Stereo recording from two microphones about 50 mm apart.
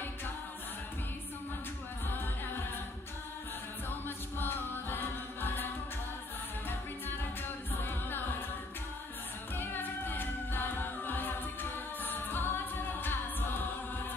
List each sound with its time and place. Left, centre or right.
4.4 s music: left
9.6 s a capella: left
12.0 s music: left